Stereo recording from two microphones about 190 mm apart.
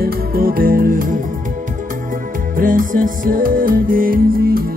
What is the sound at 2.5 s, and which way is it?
Music, 45° right (ahead or behind).